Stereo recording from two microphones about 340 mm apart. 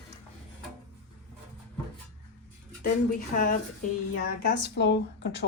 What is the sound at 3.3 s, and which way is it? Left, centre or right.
Speech, left.